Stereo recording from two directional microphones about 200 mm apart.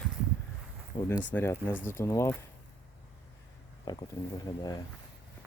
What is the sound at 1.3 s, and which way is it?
Speech, 10° left (ahead or behind).